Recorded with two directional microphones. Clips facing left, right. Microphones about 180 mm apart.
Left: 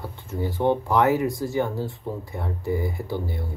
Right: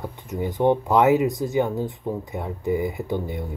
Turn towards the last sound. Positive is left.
turn(degrees=-20)  # may be behind; listen again after turning